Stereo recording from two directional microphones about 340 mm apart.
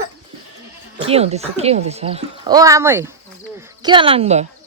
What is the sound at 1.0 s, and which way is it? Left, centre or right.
Speech, centre.